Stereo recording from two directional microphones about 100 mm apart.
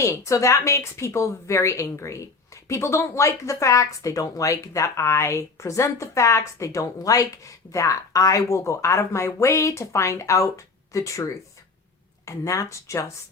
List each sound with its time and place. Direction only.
0.0 s a woman's voice: 30° left (ahead or behind)